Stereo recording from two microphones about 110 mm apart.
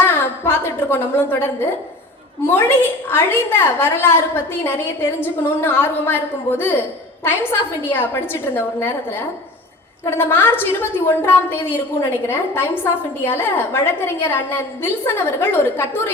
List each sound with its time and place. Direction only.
0.0 s a sound: 20° left (ahead or behind)
2.5 s a woman's voice: 20° left (ahead or behind)
7.9 s a woman's voice: 20° left (ahead or behind)